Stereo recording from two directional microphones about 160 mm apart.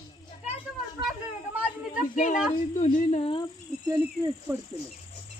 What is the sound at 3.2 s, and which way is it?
Speech, 35° left (ahead or behind).